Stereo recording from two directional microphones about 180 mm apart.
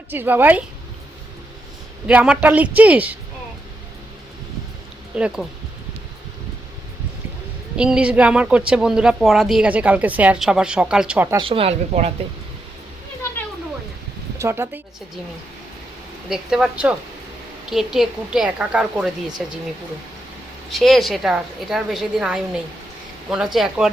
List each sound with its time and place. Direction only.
0.1 s a woman's voice: 10° right (ahead or behind)
2.0 s a woman's voice: 5° right (ahead or behind)
5.1 s a woman's voice: 5° right (ahead or behind)
7.8 s speech: 5° right (ahead or behind)
11.3 s speech: 30° right (ahead or behind)
14.3 s speech: 15° right (ahead or behind)
16.3 s speech: 5° right (ahead or behind)
20.7 s speech: centre (ahead or behind)